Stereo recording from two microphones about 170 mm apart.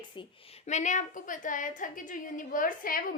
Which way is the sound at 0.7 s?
45° left (ahead or behind).